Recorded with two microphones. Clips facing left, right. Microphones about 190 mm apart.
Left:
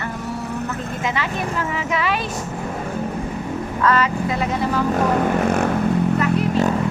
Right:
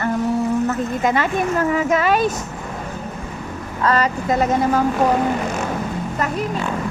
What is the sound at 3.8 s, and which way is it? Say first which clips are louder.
Speech: right 1 dB; 40° right (ahead or behind).